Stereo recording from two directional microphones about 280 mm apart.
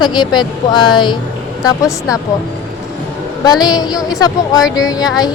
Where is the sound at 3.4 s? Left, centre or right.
Centre.